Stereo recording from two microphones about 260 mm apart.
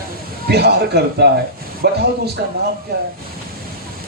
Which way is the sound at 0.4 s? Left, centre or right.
Right.